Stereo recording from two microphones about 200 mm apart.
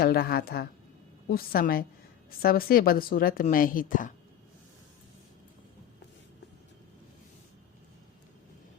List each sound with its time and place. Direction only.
0.0 s speech: 50° left (ahead or behind)